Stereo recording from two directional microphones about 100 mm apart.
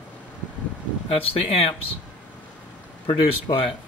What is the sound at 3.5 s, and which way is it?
Speech, 50° left (ahead or behind).